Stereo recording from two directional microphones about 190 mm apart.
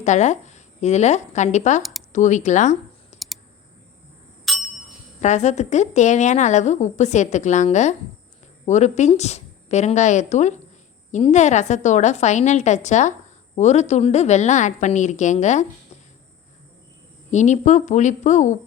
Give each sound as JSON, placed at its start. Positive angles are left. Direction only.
{"t": 0.0, "sound": "a woman's voice", "side_deg": 40}
{"t": 3.1, "sound": "computer keyboard", "side_deg": 35}
{"t": 4.5, "sound": "a sound", "side_deg": 0}
{"t": 5.2, "sound": "a woman's voice", "side_deg": 40}
{"t": 17.3, "sound": "a woman's voice", "side_deg": 40}